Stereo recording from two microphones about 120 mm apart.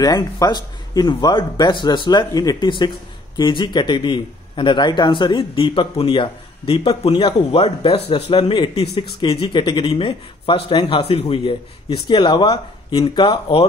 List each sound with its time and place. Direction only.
0.0 s speech: 35° left (ahead or behind)